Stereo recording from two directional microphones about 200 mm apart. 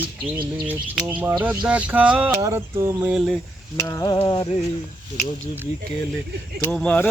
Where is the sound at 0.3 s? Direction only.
25° right (ahead or behind).